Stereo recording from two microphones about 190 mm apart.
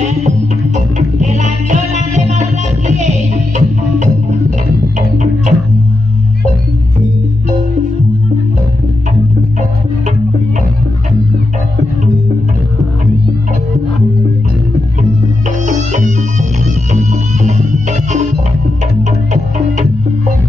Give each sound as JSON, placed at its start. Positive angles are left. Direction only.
{"t": 0.7, "sound": "music", "side_deg": -40}
{"t": 15.6, "sound": "music", "side_deg": -40}